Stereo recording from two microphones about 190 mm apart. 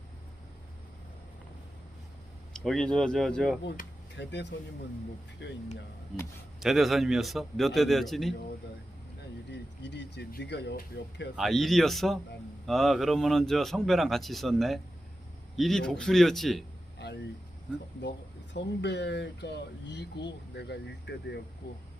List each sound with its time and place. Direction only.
2.5 s speech: 5° left (ahead or behind)
4.2 s speech: 65° left (ahead or behind)
6.6 s speech: centre (ahead or behind)
9.5 s speech: 65° left (ahead or behind)
11.3 s speech: centre (ahead or behind)
17.7 s speech: centre (ahead or behind)
18.5 s speech: 65° left (ahead or behind)